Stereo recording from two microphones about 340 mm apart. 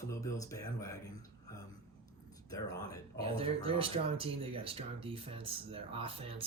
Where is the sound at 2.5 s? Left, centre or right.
Centre.